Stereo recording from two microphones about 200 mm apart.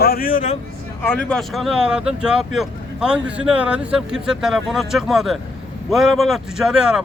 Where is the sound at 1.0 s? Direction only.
10° left (ahead or behind).